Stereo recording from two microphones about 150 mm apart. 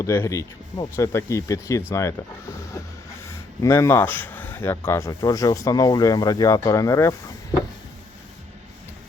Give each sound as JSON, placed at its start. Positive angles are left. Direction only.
{"t": 0.0, "sound": "speech", "side_deg": 20}
{"t": 3.2, "sound": "speech", "side_deg": 20}